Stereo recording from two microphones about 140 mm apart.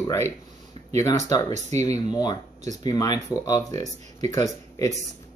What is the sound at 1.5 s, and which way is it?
Speech, 55° right (ahead or behind).